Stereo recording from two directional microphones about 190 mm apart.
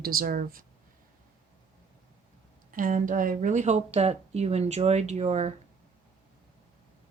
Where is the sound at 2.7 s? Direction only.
45° right (ahead or behind).